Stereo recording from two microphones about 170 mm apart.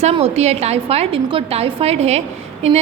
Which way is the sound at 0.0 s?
35° right (ahead or behind).